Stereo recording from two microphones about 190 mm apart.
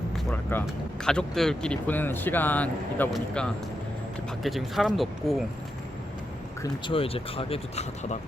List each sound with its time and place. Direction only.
0.5 s speech: 10° left (ahead or behind)
6.6 s speech: 25° left (ahead or behind)